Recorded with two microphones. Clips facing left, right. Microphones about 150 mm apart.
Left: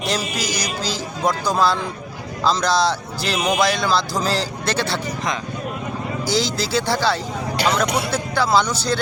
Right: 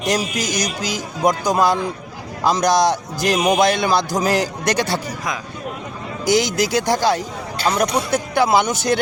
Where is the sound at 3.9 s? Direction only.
20° right (ahead or behind).